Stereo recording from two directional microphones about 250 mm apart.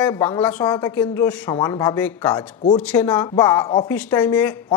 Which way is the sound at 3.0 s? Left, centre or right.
Centre.